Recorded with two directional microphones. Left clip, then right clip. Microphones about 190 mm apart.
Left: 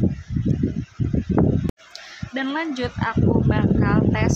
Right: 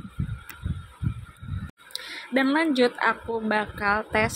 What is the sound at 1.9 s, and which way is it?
Speech, 20° right (ahead or behind).